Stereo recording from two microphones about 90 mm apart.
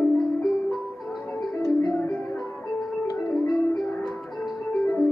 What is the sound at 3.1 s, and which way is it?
Music, centre (ahead or behind).